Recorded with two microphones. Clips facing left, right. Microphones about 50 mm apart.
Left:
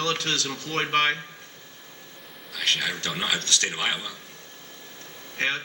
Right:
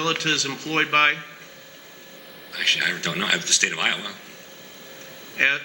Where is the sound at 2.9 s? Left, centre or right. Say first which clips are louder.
Right 4 dB; right.